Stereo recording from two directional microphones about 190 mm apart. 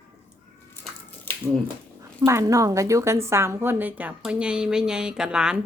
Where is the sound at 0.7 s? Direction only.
10° left (ahead or behind).